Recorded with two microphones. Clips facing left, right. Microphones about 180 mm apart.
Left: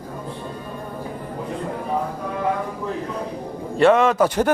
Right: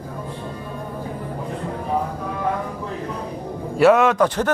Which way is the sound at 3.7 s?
5° right (ahead or behind).